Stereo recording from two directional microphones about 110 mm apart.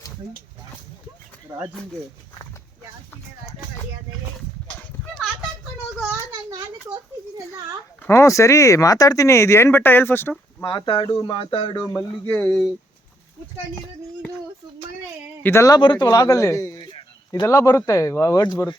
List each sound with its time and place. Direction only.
8.0 s speech: 25° left (ahead or behind)
10.6 s speech: 30° left (ahead or behind)
10.8 s speech: 50° left (ahead or behind)
11.9 s speech: 20° left (ahead or behind)
12.5 s speech: centre (ahead or behind)
15.4 s speech: 25° left (ahead or behind)
15.7 s speech: 40° left (ahead or behind)
16.9 s a sound: 50° left (ahead or behind)
17.4 s speech: 30° left (ahead or behind)